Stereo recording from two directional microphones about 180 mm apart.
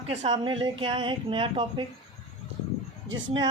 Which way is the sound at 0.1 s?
30° right (ahead or behind).